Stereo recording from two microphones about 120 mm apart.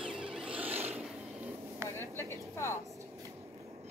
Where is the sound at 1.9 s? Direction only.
20° left (ahead or behind).